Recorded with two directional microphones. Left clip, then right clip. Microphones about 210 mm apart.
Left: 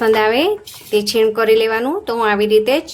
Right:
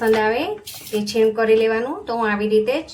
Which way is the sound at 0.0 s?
55° left (ahead or behind).